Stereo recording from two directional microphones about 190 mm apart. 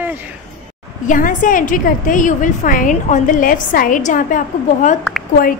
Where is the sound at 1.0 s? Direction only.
45° left (ahead or behind).